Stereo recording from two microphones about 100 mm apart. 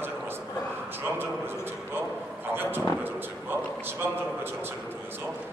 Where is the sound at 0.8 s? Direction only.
20° right (ahead or behind).